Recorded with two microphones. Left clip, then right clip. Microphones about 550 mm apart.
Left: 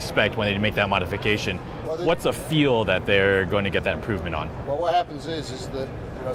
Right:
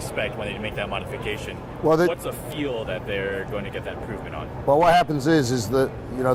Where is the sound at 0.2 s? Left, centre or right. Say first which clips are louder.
Left 7 dB; left.